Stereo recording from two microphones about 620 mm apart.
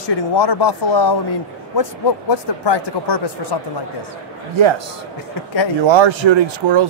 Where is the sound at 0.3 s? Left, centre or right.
Left.